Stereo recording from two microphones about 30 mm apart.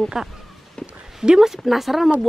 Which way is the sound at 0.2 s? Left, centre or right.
Centre.